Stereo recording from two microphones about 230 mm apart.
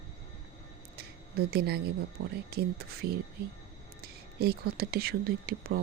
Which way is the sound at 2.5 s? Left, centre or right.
Right.